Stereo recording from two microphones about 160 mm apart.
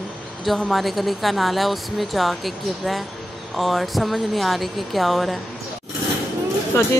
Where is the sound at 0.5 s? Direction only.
Centre (ahead or behind).